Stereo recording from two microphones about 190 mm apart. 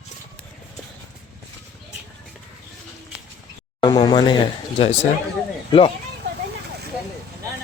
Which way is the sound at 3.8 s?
25° left (ahead or behind).